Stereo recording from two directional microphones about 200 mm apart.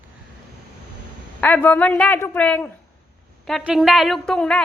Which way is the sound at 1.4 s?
10° left (ahead or behind).